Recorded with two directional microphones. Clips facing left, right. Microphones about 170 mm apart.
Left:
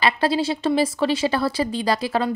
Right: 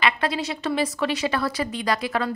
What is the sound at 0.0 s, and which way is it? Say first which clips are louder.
Speech: left 4 dB; 30° left (ahead or behind).